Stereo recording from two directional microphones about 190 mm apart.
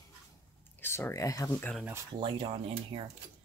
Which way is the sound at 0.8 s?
10° left (ahead or behind).